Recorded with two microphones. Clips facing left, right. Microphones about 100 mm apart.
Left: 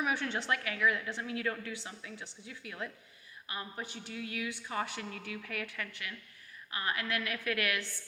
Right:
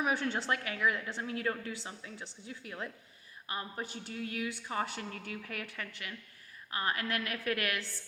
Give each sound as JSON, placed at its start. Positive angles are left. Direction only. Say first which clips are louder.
{"t": 0.0, "sound": "a woman's voice", "louder": "right 1 dB", "side_deg": -35}